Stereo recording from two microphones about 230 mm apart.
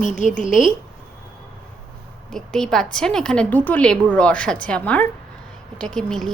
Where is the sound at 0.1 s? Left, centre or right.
Left.